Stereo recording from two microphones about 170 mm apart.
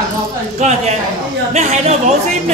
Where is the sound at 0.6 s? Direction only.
40° right (ahead or behind).